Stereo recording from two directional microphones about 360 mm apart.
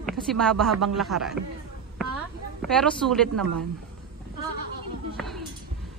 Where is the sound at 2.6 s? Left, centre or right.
Centre.